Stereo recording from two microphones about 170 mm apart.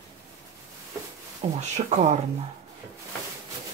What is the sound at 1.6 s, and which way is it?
Speech, 45° right (ahead or behind).